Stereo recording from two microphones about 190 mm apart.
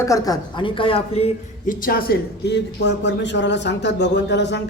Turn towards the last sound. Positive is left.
turn(degrees=65)  # may be behind; listen again after turning